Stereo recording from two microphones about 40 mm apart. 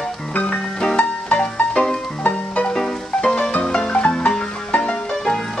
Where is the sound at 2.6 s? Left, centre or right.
Centre.